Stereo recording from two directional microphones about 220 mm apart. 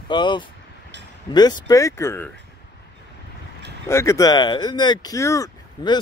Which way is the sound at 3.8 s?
10° left (ahead or behind).